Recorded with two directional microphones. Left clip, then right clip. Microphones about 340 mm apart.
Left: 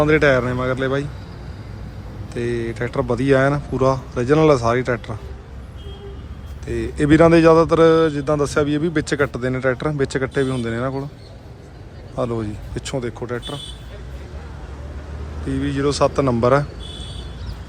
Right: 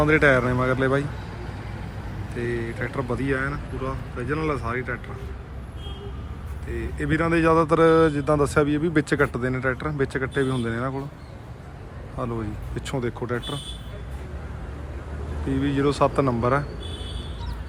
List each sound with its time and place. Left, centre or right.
0.0 s speech: centre
2.3 s speech: centre
6.7 s speech: centre
12.1 s speech: centre
15.4 s speech: centre